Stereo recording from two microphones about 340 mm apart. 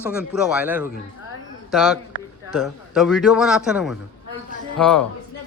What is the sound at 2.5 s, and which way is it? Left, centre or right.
A man's voice, centre.